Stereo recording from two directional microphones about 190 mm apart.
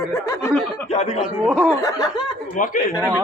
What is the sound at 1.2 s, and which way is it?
Speech, 5° right (ahead or behind).